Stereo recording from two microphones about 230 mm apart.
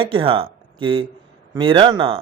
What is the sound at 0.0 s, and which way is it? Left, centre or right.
A man's voice, right.